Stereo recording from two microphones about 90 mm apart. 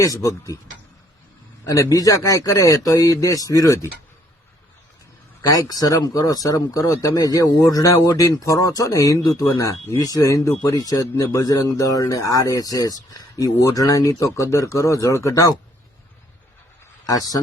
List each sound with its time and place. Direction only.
0.0 s speech: 40° left (ahead or behind)
1.6 s speech: 40° left (ahead or behind)
5.4 s speech: 45° left (ahead or behind)
17.1 s speech: 40° left (ahead or behind)